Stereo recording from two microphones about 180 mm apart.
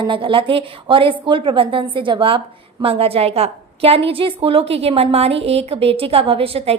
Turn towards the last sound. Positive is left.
turn(degrees=-35)  # may be behind; listen again after turning